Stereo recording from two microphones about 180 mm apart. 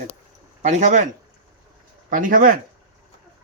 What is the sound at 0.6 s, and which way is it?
Speech, 40° right (ahead or behind).